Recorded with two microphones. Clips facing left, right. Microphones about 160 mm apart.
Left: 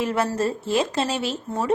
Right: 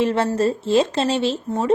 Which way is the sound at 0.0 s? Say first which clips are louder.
Right 4 dB; 25° right (ahead or behind).